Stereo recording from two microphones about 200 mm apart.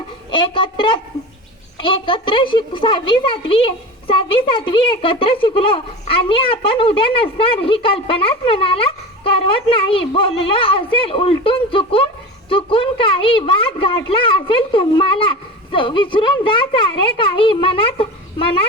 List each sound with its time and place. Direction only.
0.3 s a woman's voice: 25° left (ahead or behind)